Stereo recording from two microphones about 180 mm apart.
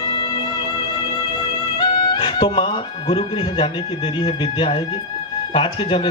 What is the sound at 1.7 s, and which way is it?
Speech, 25° left (ahead or behind).